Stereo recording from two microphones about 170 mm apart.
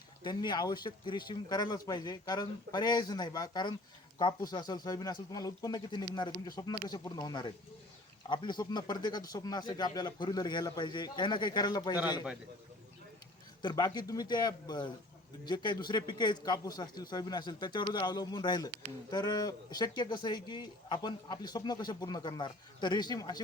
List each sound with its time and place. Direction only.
0.2 s a man's voice: 25° left (ahead or behind)
13.6 s a man's voice: 25° left (ahead or behind)